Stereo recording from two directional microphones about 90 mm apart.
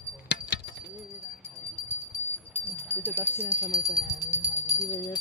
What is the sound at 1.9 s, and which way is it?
Bell, 20° left (ahead or behind).